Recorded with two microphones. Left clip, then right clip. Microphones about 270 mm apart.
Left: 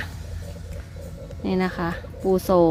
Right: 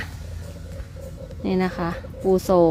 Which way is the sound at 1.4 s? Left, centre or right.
Centre.